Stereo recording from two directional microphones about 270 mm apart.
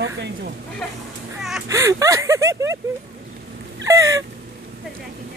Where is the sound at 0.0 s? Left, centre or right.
Right.